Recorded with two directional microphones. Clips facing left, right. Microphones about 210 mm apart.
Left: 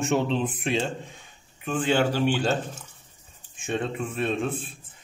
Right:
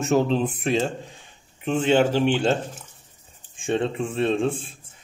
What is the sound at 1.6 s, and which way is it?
Speech, 25° right (ahead or behind).